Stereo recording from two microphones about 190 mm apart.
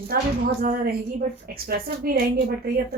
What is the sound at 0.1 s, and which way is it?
A woman's voice, 55° right (ahead or behind).